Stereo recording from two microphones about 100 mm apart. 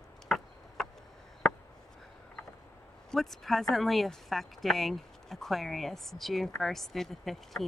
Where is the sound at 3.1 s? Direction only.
Centre (ahead or behind).